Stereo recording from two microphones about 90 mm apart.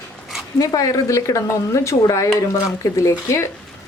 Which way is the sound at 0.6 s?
40° left (ahead or behind).